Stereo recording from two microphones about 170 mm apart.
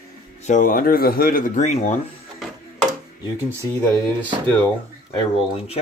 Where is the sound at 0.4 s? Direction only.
50° left (ahead or behind).